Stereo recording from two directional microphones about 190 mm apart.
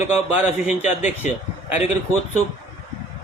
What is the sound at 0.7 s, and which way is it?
Speech, 40° left (ahead or behind).